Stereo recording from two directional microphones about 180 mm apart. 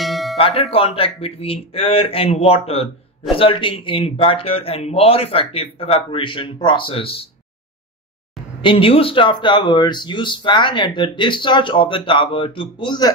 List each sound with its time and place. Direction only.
0.0 s music: centre (ahead or behind)
0.4 s speech: 30° left (ahead or behind)
8.5 s speech: 30° left (ahead or behind)